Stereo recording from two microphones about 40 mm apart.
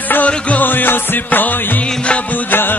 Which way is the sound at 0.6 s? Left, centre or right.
Left.